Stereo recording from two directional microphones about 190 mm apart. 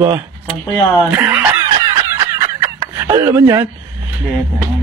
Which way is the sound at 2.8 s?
15° right (ahead or behind).